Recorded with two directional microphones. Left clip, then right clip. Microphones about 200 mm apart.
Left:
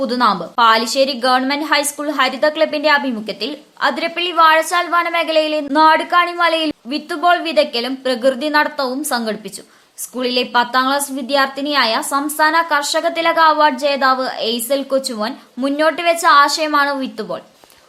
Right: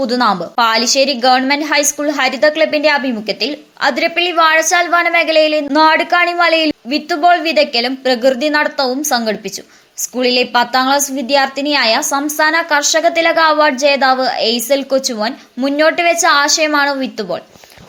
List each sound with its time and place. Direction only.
0.0 s a woman's voice: 20° right (ahead or behind)